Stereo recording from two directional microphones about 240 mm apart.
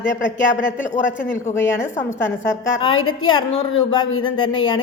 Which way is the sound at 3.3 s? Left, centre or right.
Centre.